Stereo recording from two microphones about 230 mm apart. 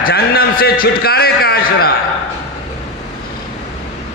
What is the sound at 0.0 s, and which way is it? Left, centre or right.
A man's voice, left.